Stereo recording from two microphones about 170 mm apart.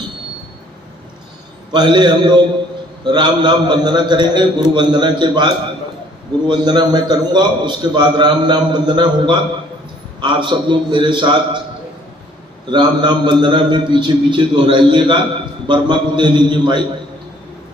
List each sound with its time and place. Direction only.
1.7 s a man's voice: 25° right (ahead or behind)
6.5 s a man's voice: 25° right (ahead or behind)
12.6 s a man's voice: 25° right (ahead or behind)